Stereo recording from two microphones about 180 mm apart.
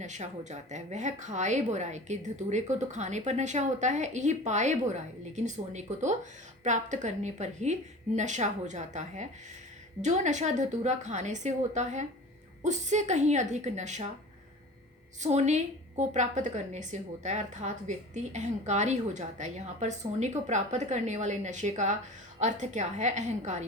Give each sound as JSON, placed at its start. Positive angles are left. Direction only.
{"t": 0.0, "sound": "a woman's voice", "side_deg": -40}
{"t": 15.2, "sound": "a woman's voice", "side_deg": -40}